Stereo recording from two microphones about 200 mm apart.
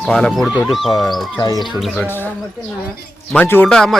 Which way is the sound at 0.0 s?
5° left (ahead or behind).